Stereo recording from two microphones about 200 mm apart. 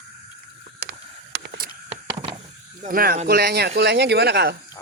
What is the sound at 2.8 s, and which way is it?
Speech, 45° right (ahead or behind).